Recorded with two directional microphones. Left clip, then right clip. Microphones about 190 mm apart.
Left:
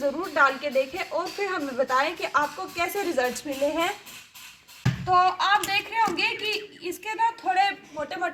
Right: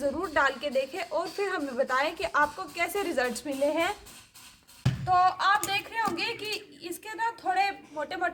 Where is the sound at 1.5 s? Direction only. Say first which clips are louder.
Left 4 dB; 30° right (ahead or behind).